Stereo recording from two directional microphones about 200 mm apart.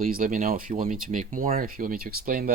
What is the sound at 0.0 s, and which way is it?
Speech, 45° right (ahead or behind).